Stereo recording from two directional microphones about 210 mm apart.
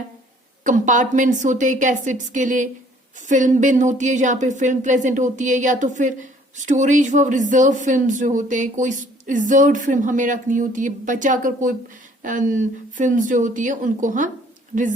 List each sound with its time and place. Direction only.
0.6 s speech: 35° right (ahead or behind)